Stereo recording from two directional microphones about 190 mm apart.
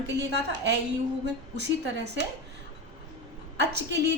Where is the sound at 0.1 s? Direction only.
65° right (ahead or behind).